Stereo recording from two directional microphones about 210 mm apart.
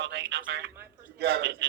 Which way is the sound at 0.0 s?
55° right (ahead or behind).